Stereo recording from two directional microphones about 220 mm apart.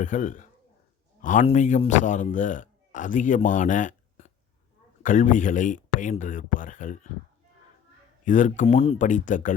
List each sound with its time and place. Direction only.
0.0 s speech: 35° left (ahead or behind)
8.2 s speech: 35° left (ahead or behind)